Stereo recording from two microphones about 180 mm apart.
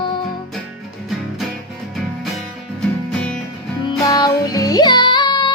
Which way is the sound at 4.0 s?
20° left (ahead or behind).